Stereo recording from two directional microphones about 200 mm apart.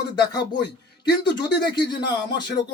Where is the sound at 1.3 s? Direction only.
20° left (ahead or behind).